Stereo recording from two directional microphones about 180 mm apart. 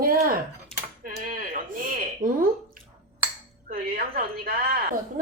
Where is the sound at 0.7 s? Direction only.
5° left (ahead or behind).